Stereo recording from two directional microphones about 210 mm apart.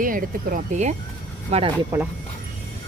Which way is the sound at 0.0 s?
40° right (ahead or behind).